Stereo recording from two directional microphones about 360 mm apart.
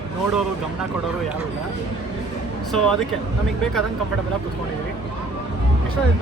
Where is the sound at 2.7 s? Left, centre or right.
Centre.